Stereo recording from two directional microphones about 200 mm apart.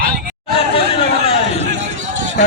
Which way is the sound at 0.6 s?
30° left (ahead or behind).